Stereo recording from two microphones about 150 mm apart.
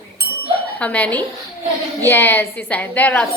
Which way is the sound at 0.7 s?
10° left (ahead or behind).